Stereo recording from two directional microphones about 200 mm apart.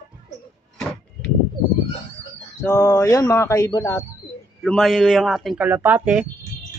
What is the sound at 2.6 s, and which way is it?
Speech, 15° left (ahead or behind).